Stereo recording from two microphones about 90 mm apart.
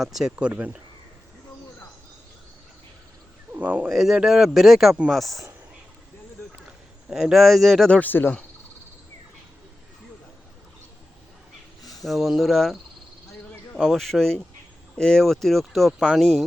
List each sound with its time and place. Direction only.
0.0 s speech: 5° right (ahead or behind)
3.5 s a sound: 20° right (ahead or behind)
3.8 s speech: 5° right (ahead or behind)
7.1 s speech: 5° right (ahead or behind)
7.9 s speech: 15° left (ahead or behind)
11.8 s a sound: 45° left (ahead or behind)
12.0 s speech: 5° right (ahead or behind)